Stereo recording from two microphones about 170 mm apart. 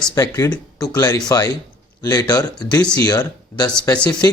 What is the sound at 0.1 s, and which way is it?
A man's voice, 20° left (ahead or behind).